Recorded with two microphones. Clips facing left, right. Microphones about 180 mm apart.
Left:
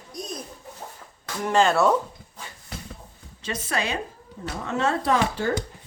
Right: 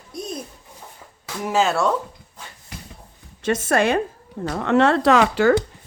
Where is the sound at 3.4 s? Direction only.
55° right (ahead or behind).